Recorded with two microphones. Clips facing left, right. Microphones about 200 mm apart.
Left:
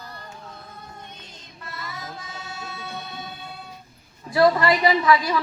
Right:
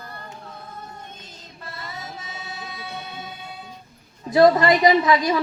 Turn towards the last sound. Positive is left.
turn(degrees=-20)  # may be behind; listen again after turning